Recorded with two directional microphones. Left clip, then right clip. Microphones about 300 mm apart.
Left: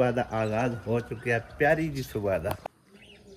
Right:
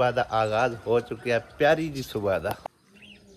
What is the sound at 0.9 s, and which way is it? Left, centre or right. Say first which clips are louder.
Speech: right 4 dB; centre.